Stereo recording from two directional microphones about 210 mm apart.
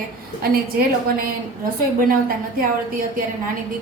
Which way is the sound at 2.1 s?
45° right (ahead or behind).